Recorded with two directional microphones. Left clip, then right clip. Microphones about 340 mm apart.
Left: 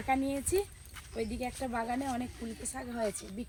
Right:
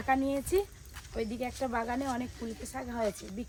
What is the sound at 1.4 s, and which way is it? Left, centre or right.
Speech, centre.